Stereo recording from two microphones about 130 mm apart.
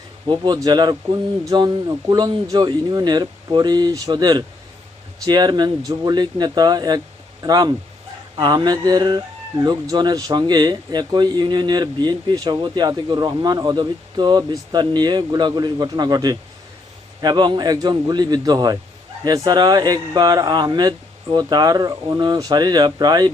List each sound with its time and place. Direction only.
0.3 s speech: 35° right (ahead or behind)